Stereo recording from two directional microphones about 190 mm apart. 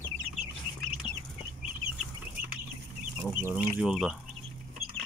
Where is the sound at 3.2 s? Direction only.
10° right (ahead or behind).